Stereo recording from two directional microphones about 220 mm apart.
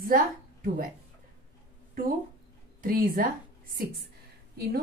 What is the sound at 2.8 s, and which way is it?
Speech, 40° right (ahead or behind).